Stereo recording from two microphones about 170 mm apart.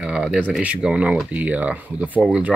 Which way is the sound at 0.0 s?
5° right (ahead or behind).